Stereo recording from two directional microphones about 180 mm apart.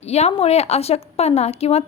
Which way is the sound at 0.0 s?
35° left (ahead or behind).